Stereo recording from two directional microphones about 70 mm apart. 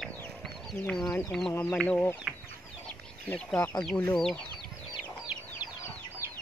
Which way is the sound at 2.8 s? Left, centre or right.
Centre.